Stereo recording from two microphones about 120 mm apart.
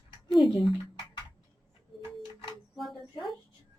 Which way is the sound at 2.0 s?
40° left (ahead or behind).